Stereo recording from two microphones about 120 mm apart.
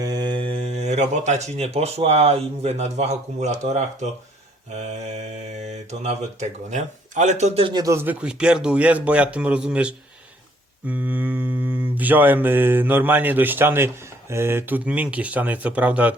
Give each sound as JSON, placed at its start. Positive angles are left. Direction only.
{"t": 0.0, "sound": "speech", "side_deg": -35}
{"t": 5.6, "sound": "speech", "side_deg": -65}
{"t": 7.6, "sound": "speech", "side_deg": -35}
{"t": 7.9, "sound": "mantra", "side_deg": -10}